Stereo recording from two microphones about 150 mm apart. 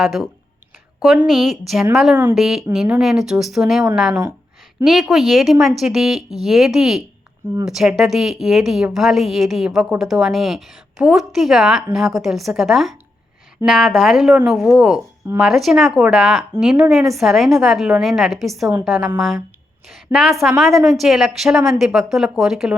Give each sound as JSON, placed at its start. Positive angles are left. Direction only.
{"t": 0.0, "sound": "speech", "side_deg": 0}
{"t": 20.1, "sound": "a woman's voice", "side_deg": -15}
{"t": 20.6, "sound": "speech", "side_deg": 0}